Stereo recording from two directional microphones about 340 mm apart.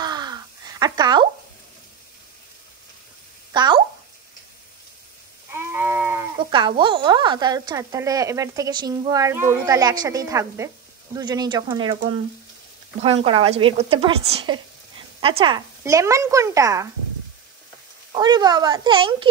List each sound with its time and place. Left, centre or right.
0.0 s crow: centre
3.5 s a sound: centre
5.5 s a woman's voice: centre
13.0 s a woman's voice: centre
18.1 s a woman's voice: centre